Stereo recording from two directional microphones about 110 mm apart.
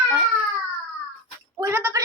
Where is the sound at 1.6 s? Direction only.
25° right (ahead or behind).